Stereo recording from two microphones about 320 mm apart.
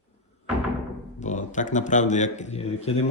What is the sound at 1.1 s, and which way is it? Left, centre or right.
A man's voice, left.